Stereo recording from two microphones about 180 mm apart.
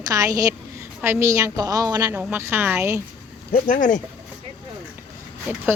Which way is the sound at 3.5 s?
45° left (ahead or behind).